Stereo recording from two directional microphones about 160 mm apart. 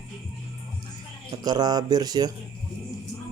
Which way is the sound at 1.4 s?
25° right (ahead or behind).